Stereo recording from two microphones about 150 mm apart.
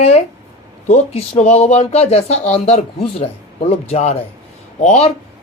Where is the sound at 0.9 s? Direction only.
45° left (ahead or behind).